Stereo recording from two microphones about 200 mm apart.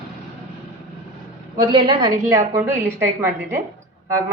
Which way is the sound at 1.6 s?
25° right (ahead or behind).